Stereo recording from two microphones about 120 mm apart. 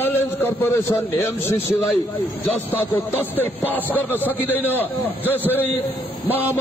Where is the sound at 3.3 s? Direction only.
15° left (ahead or behind).